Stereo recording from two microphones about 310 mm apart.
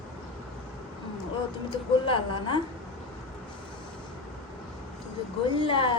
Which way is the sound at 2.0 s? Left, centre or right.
Centre.